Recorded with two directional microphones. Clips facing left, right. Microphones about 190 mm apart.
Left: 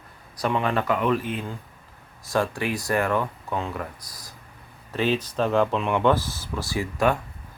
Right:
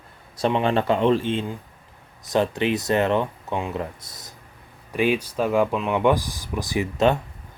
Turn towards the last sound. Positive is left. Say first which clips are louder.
# right 3 dB
turn(degrees=-20)  # may be behind; listen again after turning